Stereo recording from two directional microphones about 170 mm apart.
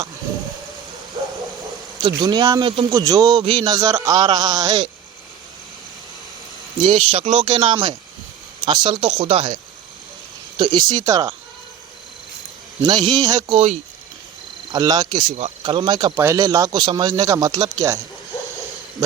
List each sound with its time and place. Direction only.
1.2 s bow-wow: 30° right (ahead or behind)
2.0 s a man's voice: 25° right (ahead or behind)
7.1 s a man's voice: 40° right (ahead or behind)
10.6 s a man's voice: 25° right (ahead or behind)
12.8 s a man's voice: 25° right (ahead or behind)
13.5 s speech: 35° right (ahead or behind)
14.7 s a man's voice: 20° right (ahead or behind)